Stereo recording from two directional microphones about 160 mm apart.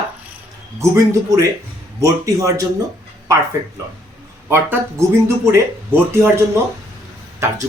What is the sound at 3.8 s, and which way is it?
Speech, 20° right (ahead or behind).